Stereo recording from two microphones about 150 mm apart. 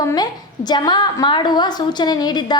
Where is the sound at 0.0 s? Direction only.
25° left (ahead or behind).